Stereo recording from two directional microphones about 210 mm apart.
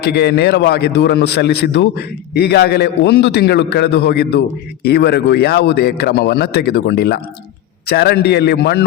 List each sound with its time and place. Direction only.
0.0 s a man's voice: 50° left (ahead or behind)